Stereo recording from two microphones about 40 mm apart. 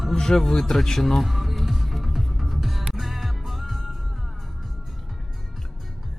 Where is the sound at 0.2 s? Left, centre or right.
Centre.